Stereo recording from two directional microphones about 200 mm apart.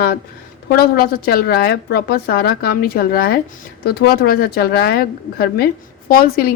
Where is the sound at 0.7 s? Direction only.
50° left (ahead or behind).